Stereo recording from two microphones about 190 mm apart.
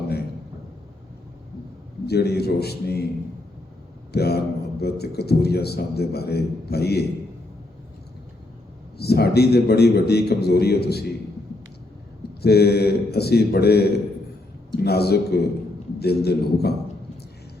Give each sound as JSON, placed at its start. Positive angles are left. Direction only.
{"t": 2.0, "sound": "a man's voice", "side_deg": 60}
{"t": 4.1, "sound": "a man's voice", "side_deg": 55}
{"t": 9.0, "sound": "a man's voice", "side_deg": 55}
{"t": 12.4, "sound": "a man's voice", "side_deg": 55}